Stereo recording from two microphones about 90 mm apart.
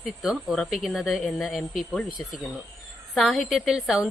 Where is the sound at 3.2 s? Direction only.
Centre (ahead or behind).